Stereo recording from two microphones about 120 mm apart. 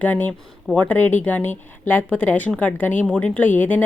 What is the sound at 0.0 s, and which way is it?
Speech, 15° left (ahead or behind).